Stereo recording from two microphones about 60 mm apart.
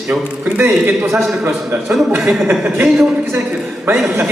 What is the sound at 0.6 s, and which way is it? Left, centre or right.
A man's voice, right.